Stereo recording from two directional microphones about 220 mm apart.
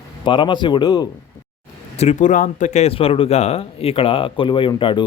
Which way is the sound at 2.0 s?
30° left (ahead or behind).